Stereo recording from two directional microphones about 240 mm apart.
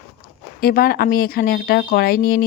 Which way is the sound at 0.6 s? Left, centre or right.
Left.